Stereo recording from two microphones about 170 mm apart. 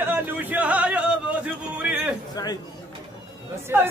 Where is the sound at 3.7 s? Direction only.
10° right (ahead or behind).